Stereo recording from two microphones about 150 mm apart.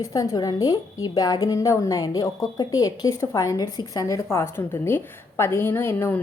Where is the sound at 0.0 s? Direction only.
25° left (ahead or behind).